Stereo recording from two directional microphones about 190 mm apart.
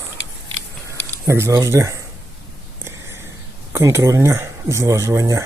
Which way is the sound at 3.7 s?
15° right (ahead or behind).